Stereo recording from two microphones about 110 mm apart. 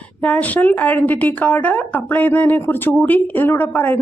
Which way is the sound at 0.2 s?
15° left (ahead or behind).